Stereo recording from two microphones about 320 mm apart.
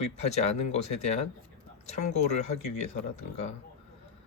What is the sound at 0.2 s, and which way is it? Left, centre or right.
Speech, centre.